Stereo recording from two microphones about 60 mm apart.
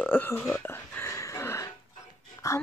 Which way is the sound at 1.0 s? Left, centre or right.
Left.